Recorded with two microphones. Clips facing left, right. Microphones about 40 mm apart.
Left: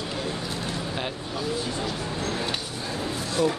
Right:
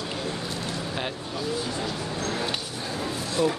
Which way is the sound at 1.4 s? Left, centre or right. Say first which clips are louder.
Even; centre.